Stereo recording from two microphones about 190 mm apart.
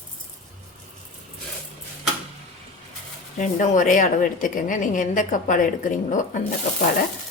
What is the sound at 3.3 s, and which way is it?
A woman's voice, 40° left (ahead or behind).